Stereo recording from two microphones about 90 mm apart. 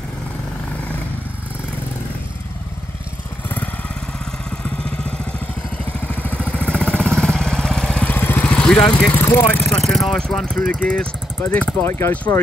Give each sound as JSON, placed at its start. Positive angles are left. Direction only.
{"t": 4.5, "sound": "vehicle", "side_deg": 10}
{"t": 8.1, "sound": "vehicle", "side_deg": 20}
{"t": 8.5, "sound": "vehicle", "side_deg": 10}
{"t": 9.1, "sound": "vehicle", "side_deg": 20}
{"t": 9.5, "sound": "speech", "side_deg": 15}
{"t": 9.8, "sound": "speech", "side_deg": 0}
{"t": 11.8, "sound": "speech", "side_deg": 30}